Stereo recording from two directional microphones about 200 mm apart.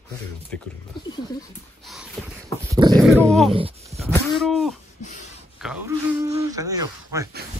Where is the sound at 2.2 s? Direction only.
5° left (ahead or behind).